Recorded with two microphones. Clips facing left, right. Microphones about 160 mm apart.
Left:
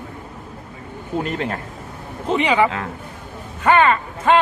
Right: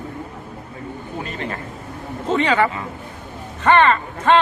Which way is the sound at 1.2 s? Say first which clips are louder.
Left 4 dB; 65° left (ahead or behind).